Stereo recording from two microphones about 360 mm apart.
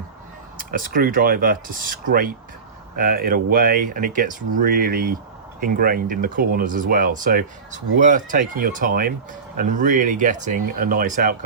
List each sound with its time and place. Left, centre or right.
0.6 s speech: right